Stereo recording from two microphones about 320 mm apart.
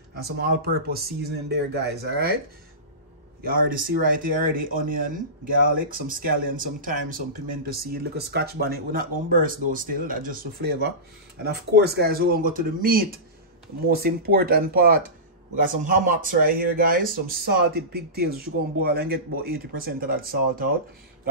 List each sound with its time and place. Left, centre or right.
0.2 s speech: right
3.4 s speech: right